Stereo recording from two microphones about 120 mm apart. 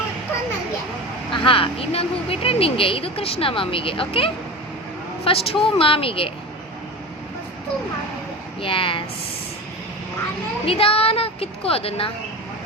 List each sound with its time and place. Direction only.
1.3 s speech: 50° left (ahead or behind)
8.6 s speech: 45° left (ahead or behind)
10.7 s speech: 50° left (ahead or behind)